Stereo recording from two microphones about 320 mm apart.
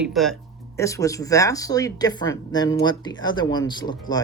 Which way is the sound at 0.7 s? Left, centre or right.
Centre.